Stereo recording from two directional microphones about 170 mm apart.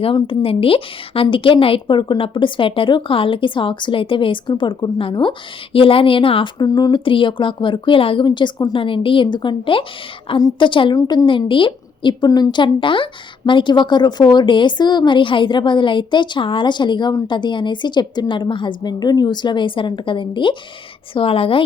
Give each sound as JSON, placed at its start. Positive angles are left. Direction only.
{"t": 0.0, "sound": "a woman's voice", "side_deg": 30}